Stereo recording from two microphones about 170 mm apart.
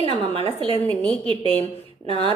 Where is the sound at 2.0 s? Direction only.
35° left (ahead or behind).